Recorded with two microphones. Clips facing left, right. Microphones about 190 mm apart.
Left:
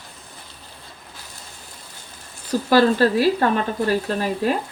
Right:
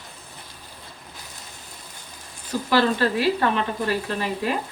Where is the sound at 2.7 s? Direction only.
40° left (ahead or behind).